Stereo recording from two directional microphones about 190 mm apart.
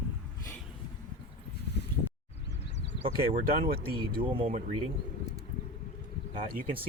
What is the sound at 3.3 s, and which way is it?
Speech, 50° right (ahead or behind).